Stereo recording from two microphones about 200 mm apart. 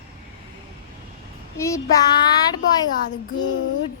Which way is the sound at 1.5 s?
15° left (ahead or behind).